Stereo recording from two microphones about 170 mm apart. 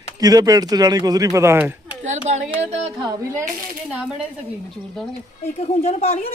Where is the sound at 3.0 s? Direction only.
20° right (ahead or behind).